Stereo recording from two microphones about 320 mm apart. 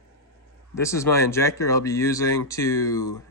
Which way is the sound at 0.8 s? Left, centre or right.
Centre.